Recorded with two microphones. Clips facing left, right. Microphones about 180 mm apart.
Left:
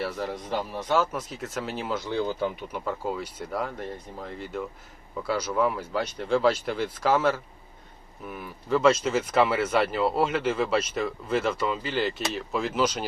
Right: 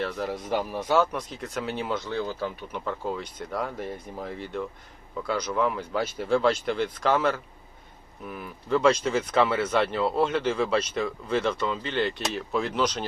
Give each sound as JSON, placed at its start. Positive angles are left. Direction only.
{"t": 0.0, "sound": "speech", "side_deg": 0}
{"t": 2.0, "sound": "speech", "side_deg": 15}
{"t": 2.8, "sound": "speech", "side_deg": 5}